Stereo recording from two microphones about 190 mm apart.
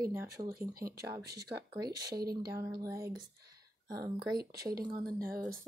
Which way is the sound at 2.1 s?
55° right (ahead or behind).